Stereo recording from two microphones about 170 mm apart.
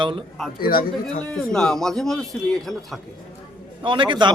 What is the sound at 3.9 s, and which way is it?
Speech, 30° right (ahead or behind).